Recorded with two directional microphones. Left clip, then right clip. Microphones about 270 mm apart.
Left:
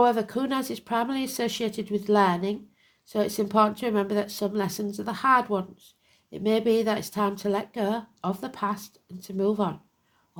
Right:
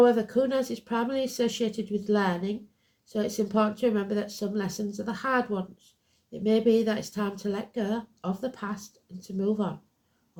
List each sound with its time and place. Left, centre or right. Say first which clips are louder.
0.0 s speech: right 1 dB; left